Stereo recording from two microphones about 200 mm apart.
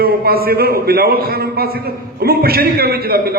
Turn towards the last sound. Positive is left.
turn(degrees=-50)  # may be behind; listen again after turning